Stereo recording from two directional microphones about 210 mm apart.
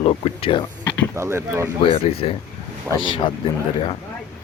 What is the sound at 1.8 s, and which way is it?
Speech, 25° left (ahead or behind).